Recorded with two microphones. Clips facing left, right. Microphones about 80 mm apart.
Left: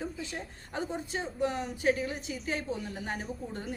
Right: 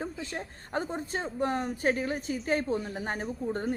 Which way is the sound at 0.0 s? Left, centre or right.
Right.